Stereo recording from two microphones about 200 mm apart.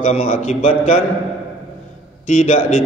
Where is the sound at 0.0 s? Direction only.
35° left (ahead or behind).